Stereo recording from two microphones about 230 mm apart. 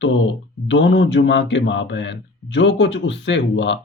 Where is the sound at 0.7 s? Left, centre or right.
Left.